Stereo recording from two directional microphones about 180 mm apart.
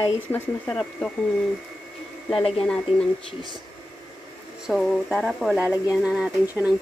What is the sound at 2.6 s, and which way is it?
Speech, 5° left (ahead or behind).